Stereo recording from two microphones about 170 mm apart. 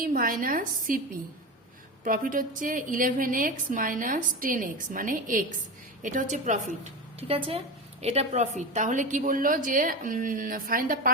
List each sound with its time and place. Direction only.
0.0 s a woman's voice: 55° right (ahead or behind)
2.0 s a woman's voice: 55° right (ahead or behind)